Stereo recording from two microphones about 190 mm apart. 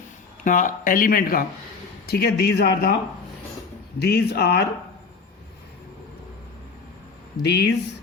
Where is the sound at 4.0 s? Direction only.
55° left (ahead or behind).